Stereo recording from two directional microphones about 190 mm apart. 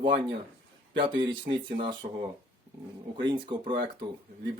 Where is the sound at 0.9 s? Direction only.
25° right (ahead or behind).